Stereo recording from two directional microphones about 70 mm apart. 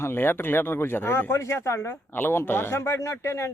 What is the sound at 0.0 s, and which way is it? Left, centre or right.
Speech, left.